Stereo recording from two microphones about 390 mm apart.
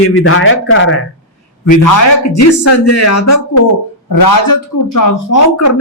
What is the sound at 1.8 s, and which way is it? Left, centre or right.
Speech, left.